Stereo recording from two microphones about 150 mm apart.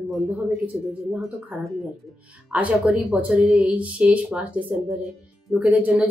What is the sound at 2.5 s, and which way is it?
Speech, 10° right (ahead or behind).